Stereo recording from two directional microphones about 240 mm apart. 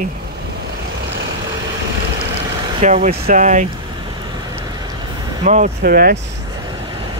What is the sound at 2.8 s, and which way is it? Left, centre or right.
Speech, right.